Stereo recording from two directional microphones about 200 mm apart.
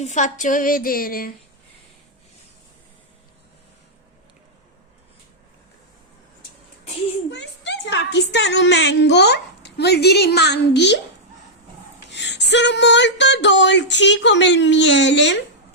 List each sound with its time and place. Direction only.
0.0 s a woman's voice: 35° left (ahead or behind)
7.3 s a woman's voice: 60° left (ahead or behind)
12.0 s speech: 60° left (ahead or behind)